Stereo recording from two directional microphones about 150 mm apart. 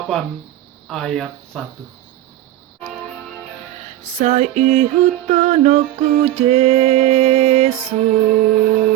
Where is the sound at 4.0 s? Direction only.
50° right (ahead or behind).